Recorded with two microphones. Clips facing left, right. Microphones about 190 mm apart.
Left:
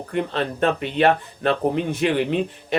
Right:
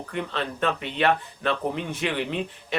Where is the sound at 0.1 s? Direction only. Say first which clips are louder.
Left 6 dB; 40° left (ahead or behind).